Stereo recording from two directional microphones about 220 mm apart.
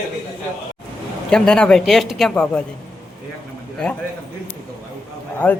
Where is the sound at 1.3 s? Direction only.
5° left (ahead or behind).